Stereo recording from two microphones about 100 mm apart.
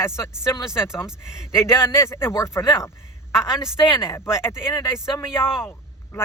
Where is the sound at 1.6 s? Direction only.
25° left (ahead or behind).